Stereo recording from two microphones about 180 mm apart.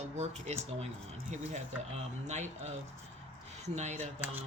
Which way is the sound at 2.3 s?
40° right (ahead or behind).